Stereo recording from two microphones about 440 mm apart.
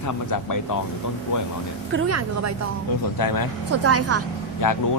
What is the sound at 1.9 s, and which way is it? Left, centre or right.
Speech, right.